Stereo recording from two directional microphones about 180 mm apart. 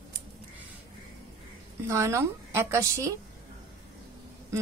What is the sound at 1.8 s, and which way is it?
Speech, 15° right (ahead or behind).